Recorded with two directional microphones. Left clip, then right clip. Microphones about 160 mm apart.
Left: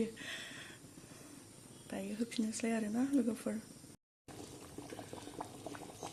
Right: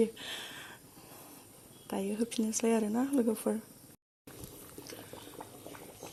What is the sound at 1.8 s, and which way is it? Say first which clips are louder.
Speech: right 7 dB; 30° right (ahead or behind).